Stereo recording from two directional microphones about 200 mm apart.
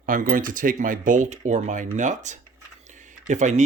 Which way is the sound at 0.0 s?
40° right (ahead or behind).